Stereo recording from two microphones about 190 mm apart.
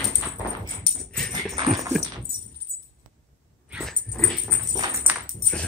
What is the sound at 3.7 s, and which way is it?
Dog, 5° right (ahead or behind).